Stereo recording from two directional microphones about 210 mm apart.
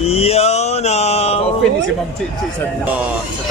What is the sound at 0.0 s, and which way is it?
Mantra, 30° left (ahead or behind).